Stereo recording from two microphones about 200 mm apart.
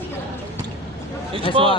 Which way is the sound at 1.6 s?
25° right (ahead or behind).